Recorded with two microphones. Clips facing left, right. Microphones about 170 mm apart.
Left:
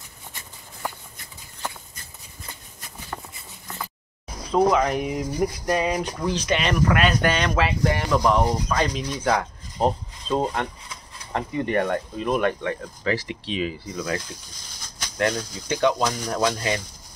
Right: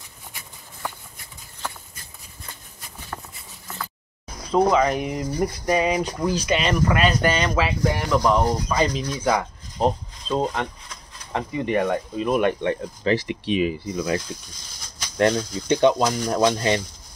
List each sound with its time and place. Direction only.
4.5 s speech: centre (ahead or behind)
11.3 s speech: 5° right (ahead or behind)
12.4 s speech: 25° right (ahead or behind)